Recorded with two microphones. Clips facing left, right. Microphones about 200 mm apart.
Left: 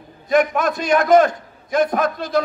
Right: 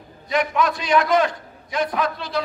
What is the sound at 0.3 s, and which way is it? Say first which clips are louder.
Speech: left 4 dB; 50° left (ahead or behind).